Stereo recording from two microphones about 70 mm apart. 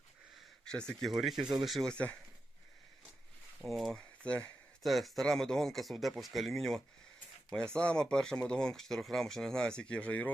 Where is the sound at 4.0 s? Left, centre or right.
Centre.